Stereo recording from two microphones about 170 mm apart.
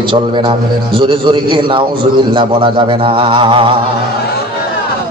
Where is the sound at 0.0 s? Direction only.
30° right (ahead or behind).